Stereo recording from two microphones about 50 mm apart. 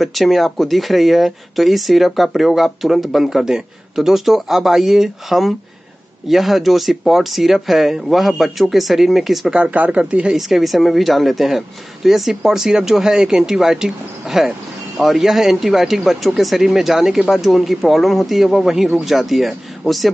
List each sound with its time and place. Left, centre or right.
0.0 s speech: centre
9.5 s speech: right
10.3 s speech: centre